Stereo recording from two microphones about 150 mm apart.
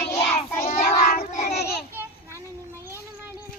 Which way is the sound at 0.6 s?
50° left (ahead or behind).